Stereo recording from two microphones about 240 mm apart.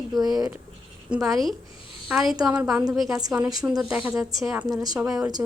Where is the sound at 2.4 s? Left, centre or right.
Centre.